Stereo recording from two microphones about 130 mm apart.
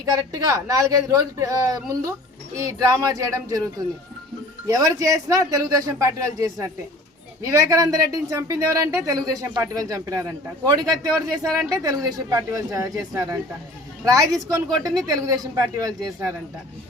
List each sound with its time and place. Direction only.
0.0 s speech: 25° right (ahead or behind)
4.6 s speech: 25° right (ahead or behind)